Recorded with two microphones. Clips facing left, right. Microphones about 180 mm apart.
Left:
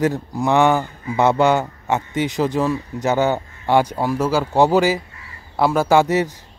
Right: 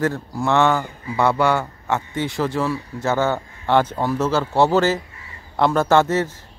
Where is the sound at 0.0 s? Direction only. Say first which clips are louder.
Left 2 dB; 20° left (ahead or behind).